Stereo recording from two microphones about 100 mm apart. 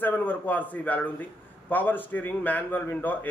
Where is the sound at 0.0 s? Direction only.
20° left (ahead or behind).